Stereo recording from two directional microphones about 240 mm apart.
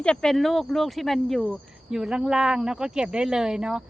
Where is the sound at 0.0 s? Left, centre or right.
Centre.